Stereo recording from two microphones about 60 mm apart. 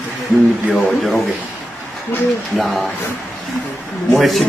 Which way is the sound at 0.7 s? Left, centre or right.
Centre.